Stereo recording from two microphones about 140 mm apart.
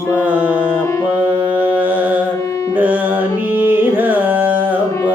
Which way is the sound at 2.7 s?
10° right (ahead or behind).